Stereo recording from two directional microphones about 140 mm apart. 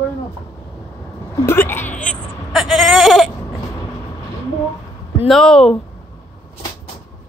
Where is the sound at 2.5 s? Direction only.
Centre (ahead or behind).